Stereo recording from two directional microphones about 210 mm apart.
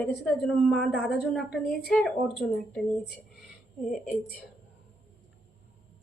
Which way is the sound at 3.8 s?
Centre (ahead or behind).